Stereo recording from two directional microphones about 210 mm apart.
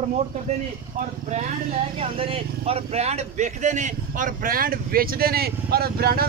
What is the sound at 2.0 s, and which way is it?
Speech, 25° right (ahead or behind).